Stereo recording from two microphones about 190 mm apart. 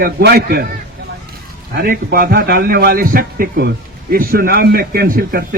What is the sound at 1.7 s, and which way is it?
A man's voice, 50° right (ahead or behind).